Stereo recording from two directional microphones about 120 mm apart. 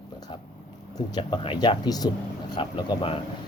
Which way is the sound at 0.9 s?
35° left (ahead or behind).